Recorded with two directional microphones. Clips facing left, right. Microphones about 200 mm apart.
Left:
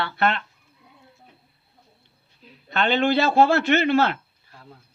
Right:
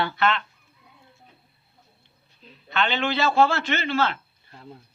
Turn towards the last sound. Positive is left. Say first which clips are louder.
# left 6 dB
turn(degrees=60)  # may be behind; listen again after turning